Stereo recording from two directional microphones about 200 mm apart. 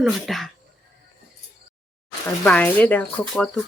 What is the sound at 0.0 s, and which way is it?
Speech, centre (ahead or behind).